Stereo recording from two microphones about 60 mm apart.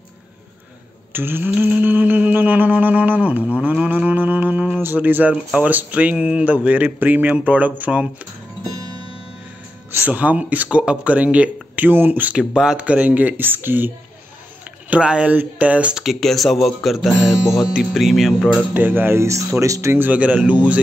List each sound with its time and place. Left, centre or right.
1.1 s speech: right
1.6 s a sound: right
3.5 s livestock: right
4.9 s speech: right
10.0 s speech: right
15.0 s speech: centre
15.9 s speech: centre
16.2 s speech: centre
18.7 s speech: right
19.6 s speech: right
20.1 s speech: right